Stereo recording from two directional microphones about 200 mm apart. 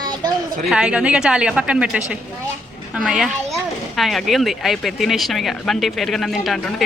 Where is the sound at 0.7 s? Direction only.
5° right (ahead or behind).